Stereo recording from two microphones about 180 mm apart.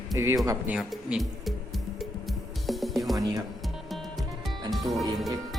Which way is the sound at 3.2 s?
20° right (ahead or behind).